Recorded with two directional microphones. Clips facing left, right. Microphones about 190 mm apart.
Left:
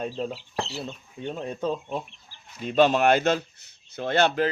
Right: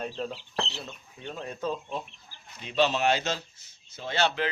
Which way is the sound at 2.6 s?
50° left (ahead or behind).